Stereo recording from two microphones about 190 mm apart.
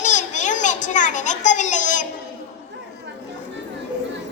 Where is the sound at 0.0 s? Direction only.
40° left (ahead or behind).